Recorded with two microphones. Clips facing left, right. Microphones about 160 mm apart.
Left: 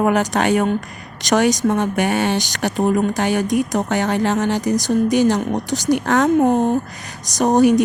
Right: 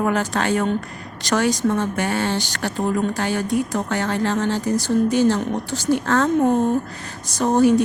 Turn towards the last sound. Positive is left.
turn(degrees=15)  # may be behind; listen again after turning